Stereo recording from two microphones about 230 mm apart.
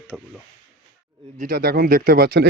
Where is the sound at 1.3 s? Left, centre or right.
Right.